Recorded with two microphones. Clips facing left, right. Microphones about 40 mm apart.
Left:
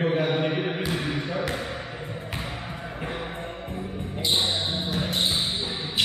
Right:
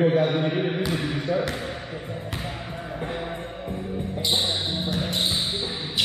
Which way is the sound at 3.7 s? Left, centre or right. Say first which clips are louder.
Right 5 dB; left.